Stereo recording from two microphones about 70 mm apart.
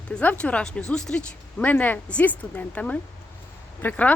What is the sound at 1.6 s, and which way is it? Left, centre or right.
Speech, left.